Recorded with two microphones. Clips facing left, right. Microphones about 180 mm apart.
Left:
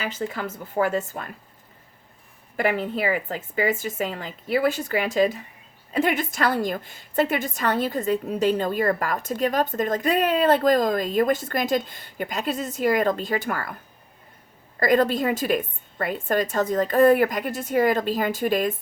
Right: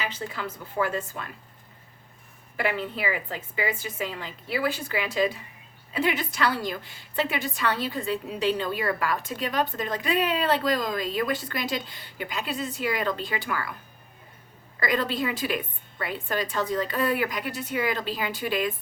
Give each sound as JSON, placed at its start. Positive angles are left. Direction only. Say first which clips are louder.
{"t": 0.0, "sound": "a woman's voice", "louder": "left 4 dB", "side_deg": 45}
{"t": 2.6, "sound": "a woman's voice", "louder": "left 5 dB", "side_deg": 45}
{"t": 14.8, "sound": "a woman's voice", "louder": "left 7 dB", "side_deg": 45}